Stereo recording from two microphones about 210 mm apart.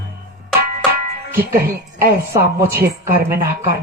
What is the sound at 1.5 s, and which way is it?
A woman's voice, 45° right (ahead or behind).